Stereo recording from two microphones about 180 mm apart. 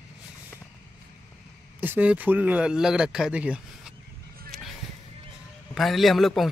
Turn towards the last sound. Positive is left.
turn(degrees=0)  # may be behind; listen again after turning